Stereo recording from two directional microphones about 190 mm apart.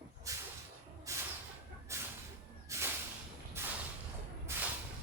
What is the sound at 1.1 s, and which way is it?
Vehicle, 15° right (ahead or behind).